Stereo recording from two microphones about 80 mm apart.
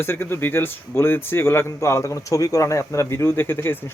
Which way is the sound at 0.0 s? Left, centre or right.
Left.